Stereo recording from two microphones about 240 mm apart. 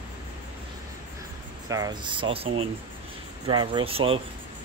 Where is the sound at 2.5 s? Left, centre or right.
Right.